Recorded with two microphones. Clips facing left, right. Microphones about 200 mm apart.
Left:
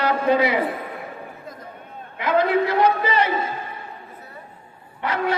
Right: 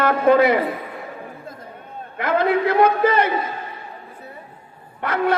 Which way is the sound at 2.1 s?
50° right (ahead or behind).